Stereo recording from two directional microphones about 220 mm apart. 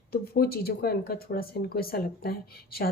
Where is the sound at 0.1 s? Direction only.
45° left (ahead or behind).